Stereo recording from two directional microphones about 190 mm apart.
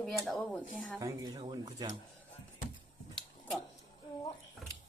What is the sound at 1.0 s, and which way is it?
Speech, 20° right (ahead or behind).